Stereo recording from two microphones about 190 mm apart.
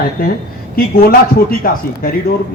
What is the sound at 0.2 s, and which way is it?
A man's voice, 50° left (ahead or behind).